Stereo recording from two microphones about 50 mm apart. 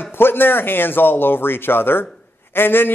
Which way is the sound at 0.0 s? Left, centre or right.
Left.